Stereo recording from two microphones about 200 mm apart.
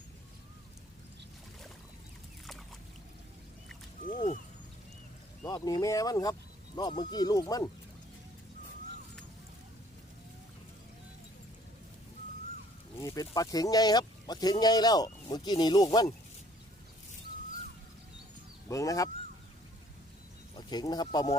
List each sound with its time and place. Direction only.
5.4 s speech: 20° left (ahead or behind)
13.0 s speech: 15° left (ahead or behind)
18.7 s speech: 15° left (ahead or behind)
20.6 s speech: 20° left (ahead or behind)